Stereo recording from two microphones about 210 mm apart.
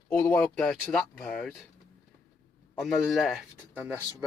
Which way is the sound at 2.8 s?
Centre (ahead or behind).